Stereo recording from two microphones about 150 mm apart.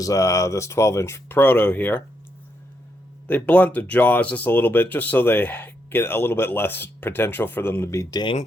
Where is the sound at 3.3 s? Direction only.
10° left (ahead or behind).